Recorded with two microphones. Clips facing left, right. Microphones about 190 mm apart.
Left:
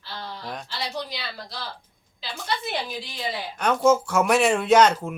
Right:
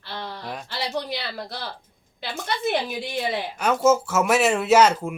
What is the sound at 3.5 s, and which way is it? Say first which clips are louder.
Speech: even; 5° right (ahead or behind).